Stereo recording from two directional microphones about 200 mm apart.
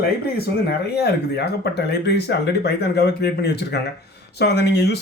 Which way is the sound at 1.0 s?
55° left (ahead or behind).